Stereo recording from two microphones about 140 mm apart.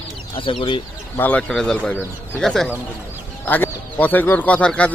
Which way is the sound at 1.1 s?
10° left (ahead or behind).